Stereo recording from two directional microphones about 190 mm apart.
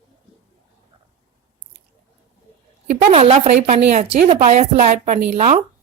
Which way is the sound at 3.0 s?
35° right (ahead or behind).